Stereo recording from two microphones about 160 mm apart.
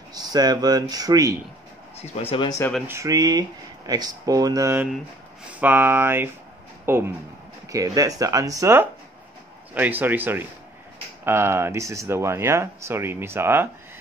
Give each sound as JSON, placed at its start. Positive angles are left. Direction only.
{"t": 0.1, "sound": "speech", "side_deg": -25}
{"t": 2.0, "sound": "speech", "side_deg": 40}
{"t": 2.9, "sound": "speech", "side_deg": -20}